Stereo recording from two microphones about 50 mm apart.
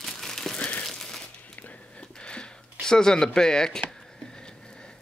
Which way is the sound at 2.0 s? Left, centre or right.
Centre.